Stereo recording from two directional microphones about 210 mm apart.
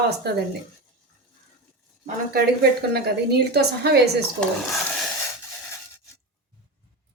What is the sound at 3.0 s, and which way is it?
A woman's voice, 50° right (ahead or behind).